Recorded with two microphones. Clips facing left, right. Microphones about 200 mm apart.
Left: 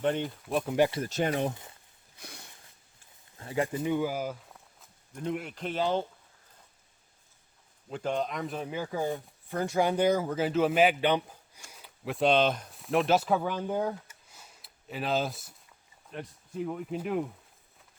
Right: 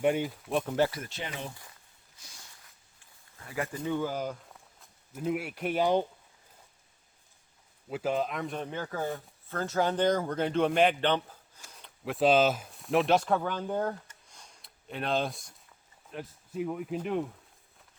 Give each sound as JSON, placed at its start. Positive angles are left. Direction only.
{"t": 0.0, "sound": "speech", "side_deg": -10}
{"t": 0.9, "sound": "speech", "side_deg": 25}
{"t": 1.1, "sound": "speech", "side_deg": 45}
{"t": 2.1, "sound": "a sound", "side_deg": 60}
{"t": 3.3, "sound": "speech", "side_deg": 30}
{"t": 7.9, "sound": "speech", "side_deg": -5}